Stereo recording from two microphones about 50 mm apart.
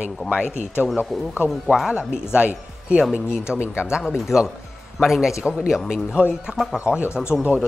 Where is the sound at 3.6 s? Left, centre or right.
Left.